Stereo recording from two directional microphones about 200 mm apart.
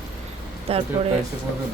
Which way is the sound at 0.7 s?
30° right (ahead or behind).